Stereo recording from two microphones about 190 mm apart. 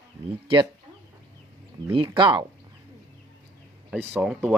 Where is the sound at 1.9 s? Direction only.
25° right (ahead or behind).